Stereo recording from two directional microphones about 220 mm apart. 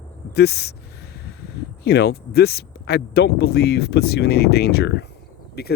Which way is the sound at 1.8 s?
50° left (ahead or behind).